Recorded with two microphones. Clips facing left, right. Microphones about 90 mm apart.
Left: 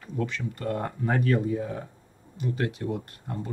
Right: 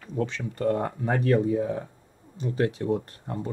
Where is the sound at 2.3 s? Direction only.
30° right (ahead or behind).